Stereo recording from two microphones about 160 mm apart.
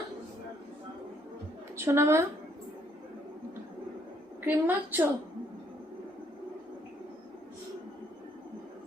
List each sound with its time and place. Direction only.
1.7 s a woman's voice: 15° right (ahead or behind)
4.4 s a woman's voice: 10° right (ahead or behind)